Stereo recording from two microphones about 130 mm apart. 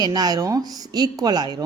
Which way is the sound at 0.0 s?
30° right (ahead or behind).